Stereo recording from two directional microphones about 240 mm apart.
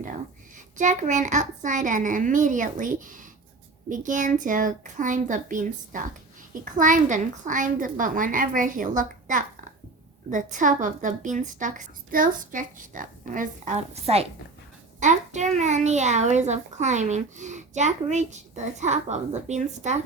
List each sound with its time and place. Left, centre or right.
0.8 s a woman's voice: right